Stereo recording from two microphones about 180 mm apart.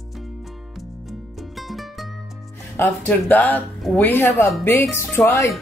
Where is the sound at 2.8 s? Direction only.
10° left (ahead or behind).